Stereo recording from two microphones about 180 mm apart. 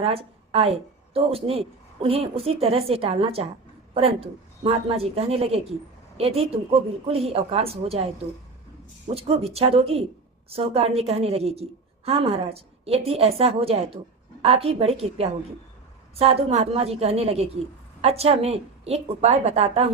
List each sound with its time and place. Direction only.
0.0 s a woman's voice: 35° right (ahead or behind)